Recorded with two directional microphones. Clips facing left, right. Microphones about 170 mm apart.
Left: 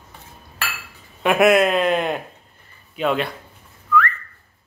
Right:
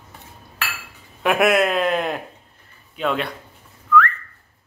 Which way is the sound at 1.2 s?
Centre (ahead or behind).